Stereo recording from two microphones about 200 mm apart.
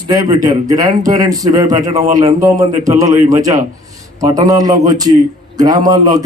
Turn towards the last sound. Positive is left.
turn(degrees=-20)  # may be behind; listen again after turning